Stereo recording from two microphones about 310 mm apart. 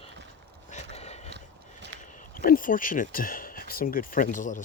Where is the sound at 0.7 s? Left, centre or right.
Left.